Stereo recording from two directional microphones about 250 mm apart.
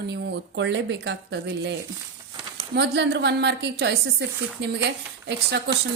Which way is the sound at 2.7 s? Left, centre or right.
Right.